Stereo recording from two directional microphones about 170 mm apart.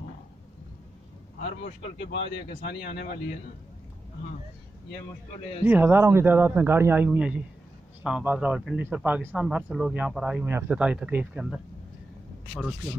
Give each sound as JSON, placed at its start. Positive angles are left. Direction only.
{"t": 2.7, "sound": "speech", "side_deg": 65}
{"t": 5.7, "sound": "speech", "side_deg": -10}